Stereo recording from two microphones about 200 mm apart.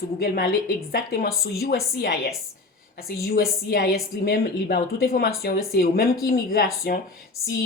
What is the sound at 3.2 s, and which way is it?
A woman's voice, 50° left (ahead or behind).